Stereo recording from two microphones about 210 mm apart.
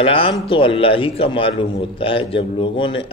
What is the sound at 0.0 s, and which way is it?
A man's voice, 25° left (ahead or behind).